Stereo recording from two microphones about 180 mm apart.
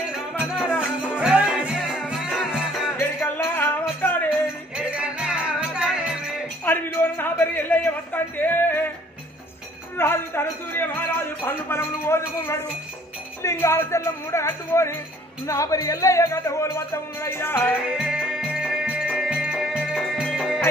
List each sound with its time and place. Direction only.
0.6 s music: 5° right (ahead or behind)
3.2 s music: 10° left (ahead or behind)
4.7 s music: 5° right (ahead or behind)
6.6 s a sound: 10° left (ahead or behind)
9.9 s music: 10° left (ahead or behind)
13.4 s speech: 15° left (ahead or behind)
17.9 s music: 5° right (ahead or behind)